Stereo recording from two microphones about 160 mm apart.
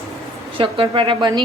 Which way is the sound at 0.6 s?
30° right (ahead or behind).